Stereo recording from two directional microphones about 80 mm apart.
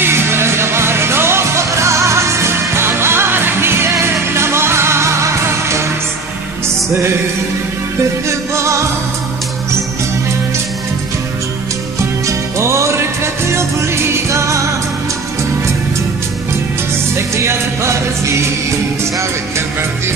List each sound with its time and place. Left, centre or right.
0.0 s music: right
8.3 s music: right
12.3 s music: right
17.4 s music: right